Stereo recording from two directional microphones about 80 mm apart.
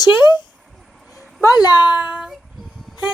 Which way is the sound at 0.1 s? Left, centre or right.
Left.